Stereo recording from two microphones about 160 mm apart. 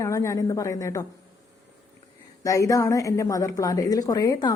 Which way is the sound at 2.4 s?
20° left (ahead or behind).